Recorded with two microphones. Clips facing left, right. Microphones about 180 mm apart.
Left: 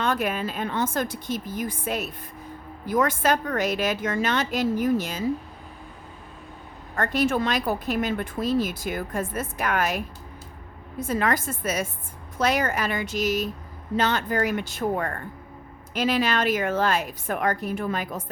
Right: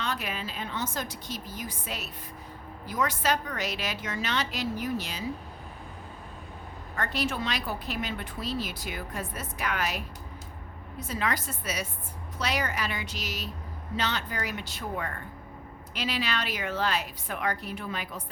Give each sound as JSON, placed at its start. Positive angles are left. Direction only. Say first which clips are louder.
{"t": 0.0, "sound": "speech", "louder": "left 8 dB", "side_deg": 50}
{"t": 6.9, "sound": "speech", "louder": "left 8 dB", "side_deg": 50}
{"t": 11.0, "sound": "speech", "louder": "left 7 dB", "side_deg": 50}